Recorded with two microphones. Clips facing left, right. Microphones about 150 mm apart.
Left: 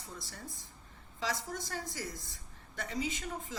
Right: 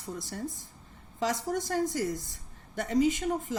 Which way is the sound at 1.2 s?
50° right (ahead or behind).